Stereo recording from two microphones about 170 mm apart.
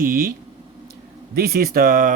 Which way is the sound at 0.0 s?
60° right (ahead or behind).